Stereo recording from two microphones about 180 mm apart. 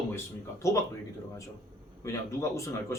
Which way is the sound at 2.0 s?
15° left (ahead or behind).